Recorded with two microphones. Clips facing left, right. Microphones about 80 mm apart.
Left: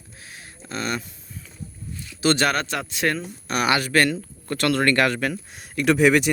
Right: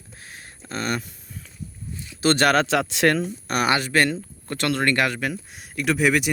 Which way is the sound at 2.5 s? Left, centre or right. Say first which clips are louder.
Right 6 dB; right.